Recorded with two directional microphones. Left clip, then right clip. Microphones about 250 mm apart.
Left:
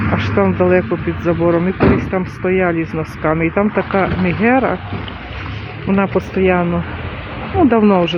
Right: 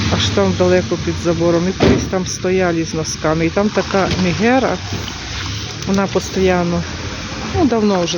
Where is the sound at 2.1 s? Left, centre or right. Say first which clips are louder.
Even; centre.